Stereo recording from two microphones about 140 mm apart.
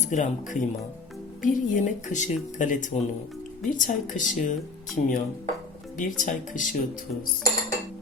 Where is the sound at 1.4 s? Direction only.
70° left (ahead or behind).